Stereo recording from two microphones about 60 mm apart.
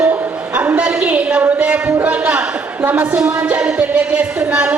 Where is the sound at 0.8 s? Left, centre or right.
Centre.